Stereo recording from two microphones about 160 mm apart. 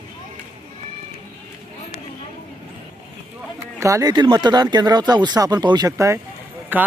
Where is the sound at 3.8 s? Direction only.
20° right (ahead or behind).